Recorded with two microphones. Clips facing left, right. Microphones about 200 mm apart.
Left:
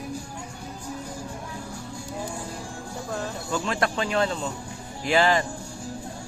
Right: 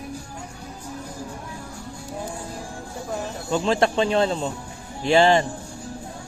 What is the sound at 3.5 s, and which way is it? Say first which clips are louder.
Speech: right 6 dB; 25° right (ahead or behind).